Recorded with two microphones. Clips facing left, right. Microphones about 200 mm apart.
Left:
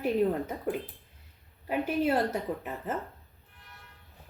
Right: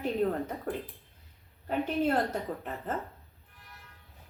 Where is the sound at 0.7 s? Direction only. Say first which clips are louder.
Left 3 dB; 15° left (ahead or behind).